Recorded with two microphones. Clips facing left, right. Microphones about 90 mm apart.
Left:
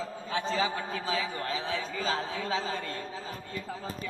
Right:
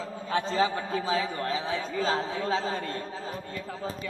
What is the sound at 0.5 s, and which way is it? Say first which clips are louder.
A man's voice: right 4 dB; 40° right (ahead or behind).